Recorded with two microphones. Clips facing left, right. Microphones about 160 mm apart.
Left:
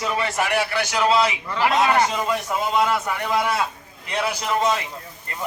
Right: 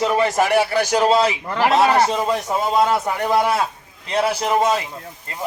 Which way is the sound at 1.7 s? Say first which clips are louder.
Right 4 dB; 35° right (ahead or behind).